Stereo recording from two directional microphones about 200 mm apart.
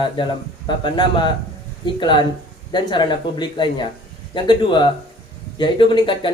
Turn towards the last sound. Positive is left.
turn(degrees=25)  # may be behind; listen again after turning